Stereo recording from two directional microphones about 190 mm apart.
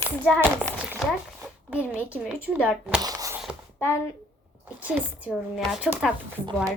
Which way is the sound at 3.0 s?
20° right (ahead or behind).